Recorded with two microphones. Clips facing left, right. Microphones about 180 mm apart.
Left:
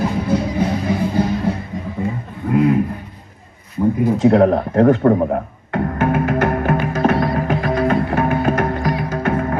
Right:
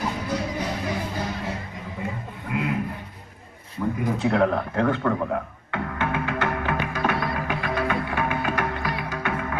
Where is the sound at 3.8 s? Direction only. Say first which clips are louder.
Left 9 dB; 35° left (ahead or behind).